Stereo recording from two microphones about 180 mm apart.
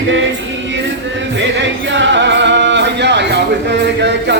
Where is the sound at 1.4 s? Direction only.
90° right; by 4.4 s 70° right (ahead or behind).